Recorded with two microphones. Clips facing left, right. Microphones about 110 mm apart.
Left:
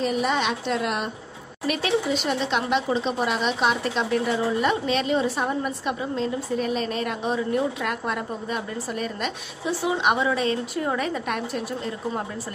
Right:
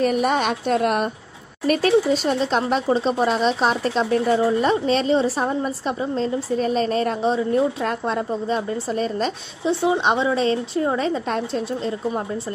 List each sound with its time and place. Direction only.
0.0 s a woman's voice: 50° right (ahead or behind); by 11.6 s 30° right (ahead or behind)